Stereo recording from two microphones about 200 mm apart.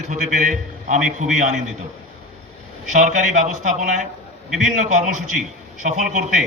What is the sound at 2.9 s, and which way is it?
A man's voice, 40° right (ahead or behind).